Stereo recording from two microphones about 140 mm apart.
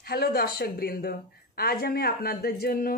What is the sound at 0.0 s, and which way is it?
Speech, 90° left.